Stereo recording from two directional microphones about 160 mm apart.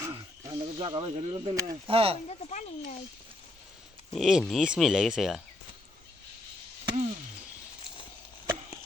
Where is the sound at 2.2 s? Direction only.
50° left (ahead or behind).